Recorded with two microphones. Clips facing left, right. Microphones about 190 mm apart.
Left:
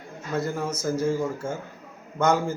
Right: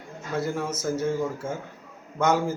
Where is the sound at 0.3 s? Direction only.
5° right (ahead or behind).